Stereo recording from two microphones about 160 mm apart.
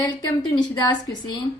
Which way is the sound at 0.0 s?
25° left (ahead or behind).